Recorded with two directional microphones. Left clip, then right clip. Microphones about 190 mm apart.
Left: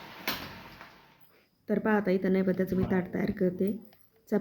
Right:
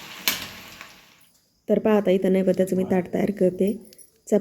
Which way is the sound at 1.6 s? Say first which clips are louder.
Right 8 dB; 15° right (ahead or behind).